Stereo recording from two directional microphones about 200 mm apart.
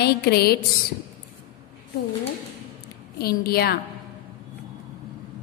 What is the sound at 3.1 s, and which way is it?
Speech, 50° left (ahead or behind).